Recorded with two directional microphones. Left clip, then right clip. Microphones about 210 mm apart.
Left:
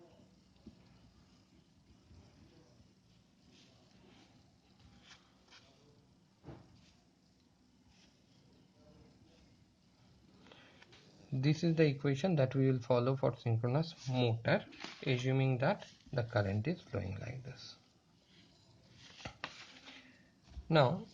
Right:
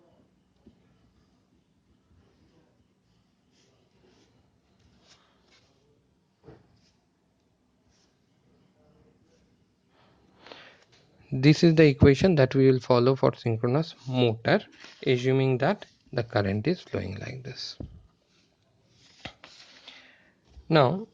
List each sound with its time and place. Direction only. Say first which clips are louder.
10.4 s walk: right 13 dB; 45° right (ahead or behind)
11.3 s speech: right 13 dB; 45° right (ahead or behind)
20.7 s speech: right 8 dB; 40° right (ahead or behind)